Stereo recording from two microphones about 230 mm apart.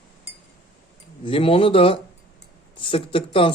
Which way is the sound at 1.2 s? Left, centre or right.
Left.